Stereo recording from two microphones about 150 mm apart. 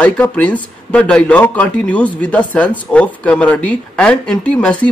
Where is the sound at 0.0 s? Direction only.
10° left (ahead or behind).